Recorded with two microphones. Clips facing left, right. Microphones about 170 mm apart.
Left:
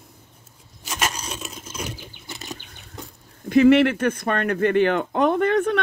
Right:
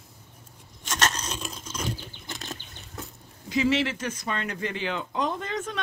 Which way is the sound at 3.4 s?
55° left (ahead or behind).